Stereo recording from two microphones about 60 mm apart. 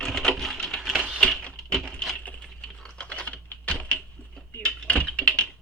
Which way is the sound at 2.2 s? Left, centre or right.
Left.